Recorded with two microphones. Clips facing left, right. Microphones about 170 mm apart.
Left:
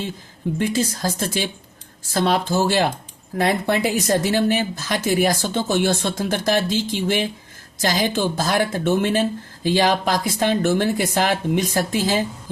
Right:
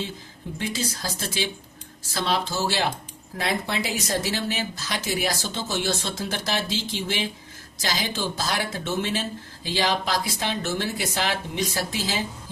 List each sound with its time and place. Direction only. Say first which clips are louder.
0.6 s speech: left 7 dB; 50° left (ahead or behind)